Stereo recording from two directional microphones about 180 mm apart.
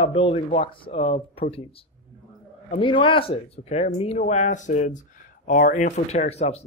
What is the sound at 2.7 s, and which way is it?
Speech, 30° left (ahead or behind).